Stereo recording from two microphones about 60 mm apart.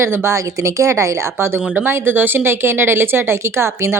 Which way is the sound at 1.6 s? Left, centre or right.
Centre.